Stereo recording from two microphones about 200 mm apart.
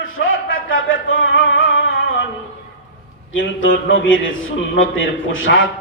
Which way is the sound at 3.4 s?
70° left (ahead or behind).